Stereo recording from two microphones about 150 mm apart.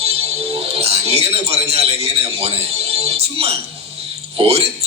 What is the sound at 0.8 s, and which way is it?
A man's voice, 45° right (ahead or behind).